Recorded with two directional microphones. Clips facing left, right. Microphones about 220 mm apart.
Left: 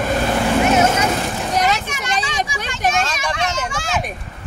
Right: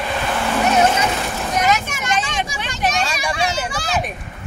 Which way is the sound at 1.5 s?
35° left (ahead or behind).